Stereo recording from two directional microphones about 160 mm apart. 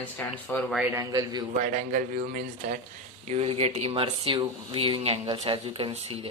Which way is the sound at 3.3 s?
40° right (ahead or behind).